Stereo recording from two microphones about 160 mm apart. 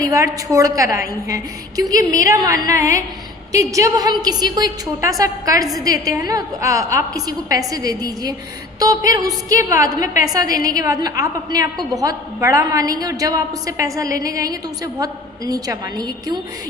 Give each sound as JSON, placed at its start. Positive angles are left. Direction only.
{"t": 0.0, "sound": "a woman's voice", "side_deg": -20}